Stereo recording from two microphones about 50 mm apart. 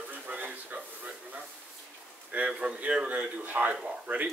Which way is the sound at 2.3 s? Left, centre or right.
Right.